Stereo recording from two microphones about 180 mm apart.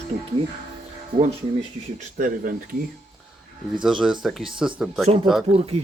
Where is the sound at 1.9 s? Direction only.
45° right (ahead or behind).